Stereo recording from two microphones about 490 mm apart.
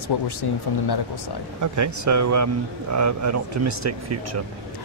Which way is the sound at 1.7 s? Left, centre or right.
Right.